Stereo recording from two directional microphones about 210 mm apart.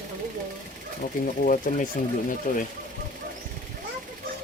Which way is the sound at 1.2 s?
40° left (ahead or behind).